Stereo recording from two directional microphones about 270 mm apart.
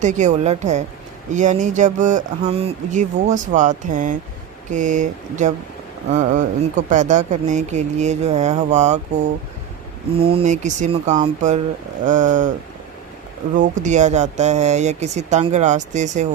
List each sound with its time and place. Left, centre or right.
0.0 s speech: right
13.6 s speech: right